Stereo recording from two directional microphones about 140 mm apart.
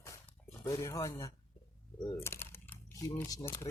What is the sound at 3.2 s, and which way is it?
Speech, 25° left (ahead or behind).